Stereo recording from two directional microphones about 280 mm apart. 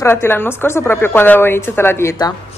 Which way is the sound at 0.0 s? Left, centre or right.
Centre.